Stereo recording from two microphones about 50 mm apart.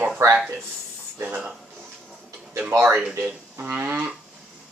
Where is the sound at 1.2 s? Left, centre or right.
Right.